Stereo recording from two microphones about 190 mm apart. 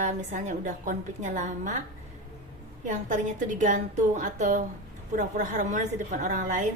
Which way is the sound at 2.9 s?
40° right (ahead or behind).